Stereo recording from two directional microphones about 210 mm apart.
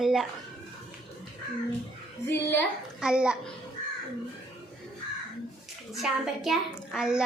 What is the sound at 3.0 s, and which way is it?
Speech, 5° right (ahead or behind).